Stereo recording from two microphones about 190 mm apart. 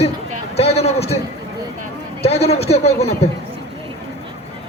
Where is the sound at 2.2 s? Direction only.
35° left (ahead or behind).